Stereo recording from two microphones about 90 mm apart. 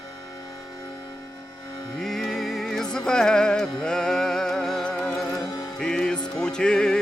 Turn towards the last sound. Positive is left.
turn(degrees=10)  # may be behind; listen again after turning